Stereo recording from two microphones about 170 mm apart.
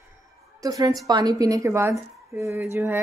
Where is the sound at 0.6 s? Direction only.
20° right (ahead or behind).